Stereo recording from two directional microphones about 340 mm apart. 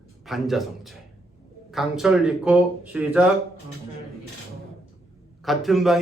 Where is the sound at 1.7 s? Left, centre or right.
Centre.